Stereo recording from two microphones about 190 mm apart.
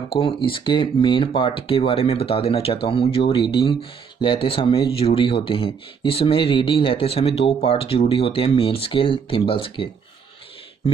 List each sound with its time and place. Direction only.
0.1 s speech: 30° left (ahead or behind)